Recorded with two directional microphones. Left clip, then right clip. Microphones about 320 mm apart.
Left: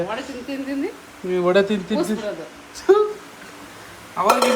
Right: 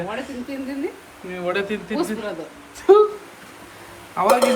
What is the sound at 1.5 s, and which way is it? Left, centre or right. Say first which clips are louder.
Speech: left 5 dB; centre.